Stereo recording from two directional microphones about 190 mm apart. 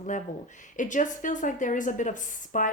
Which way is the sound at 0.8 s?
40° left (ahead or behind).